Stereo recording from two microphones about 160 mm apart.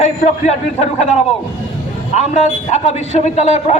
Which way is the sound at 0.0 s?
45° left (ahead or behind).